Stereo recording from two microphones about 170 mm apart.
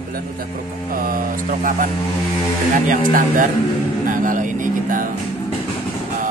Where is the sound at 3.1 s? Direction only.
50° right (ahead or behind).